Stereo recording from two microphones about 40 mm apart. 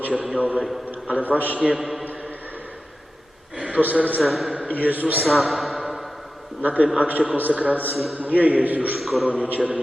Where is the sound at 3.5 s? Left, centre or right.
Right.